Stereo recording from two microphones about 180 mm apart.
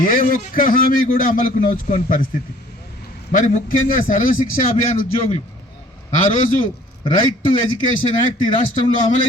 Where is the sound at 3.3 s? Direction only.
50° left (ahead or behind).